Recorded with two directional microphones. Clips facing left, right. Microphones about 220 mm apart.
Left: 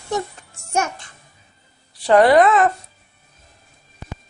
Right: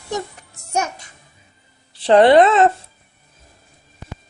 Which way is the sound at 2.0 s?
25° right (ahead or behind).